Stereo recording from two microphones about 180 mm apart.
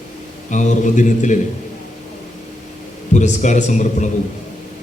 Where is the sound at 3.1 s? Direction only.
40° left (ahead or behind).